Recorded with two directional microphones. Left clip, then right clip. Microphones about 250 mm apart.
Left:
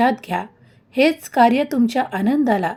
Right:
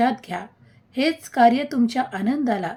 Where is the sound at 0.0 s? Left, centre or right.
Centre.